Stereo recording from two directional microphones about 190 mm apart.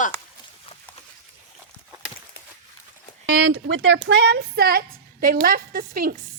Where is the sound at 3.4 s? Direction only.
75° right (ahead or behind); by 6.1 s 50° right (ahead or behind).